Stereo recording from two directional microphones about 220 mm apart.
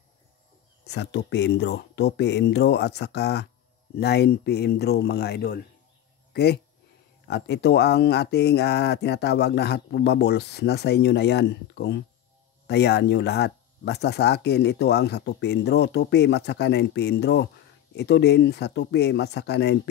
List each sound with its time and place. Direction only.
0.8 s speech: 50° left (ahead or behind)